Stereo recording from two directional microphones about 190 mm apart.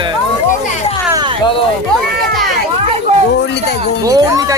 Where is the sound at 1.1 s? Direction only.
25° right (ahead or behind).